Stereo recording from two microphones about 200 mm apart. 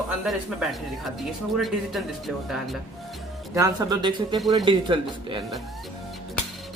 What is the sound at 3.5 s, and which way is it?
Speech, 15° right (ahead or behind).